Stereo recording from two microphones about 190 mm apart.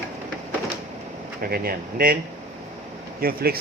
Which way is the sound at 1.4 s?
50° right (ahead or behind).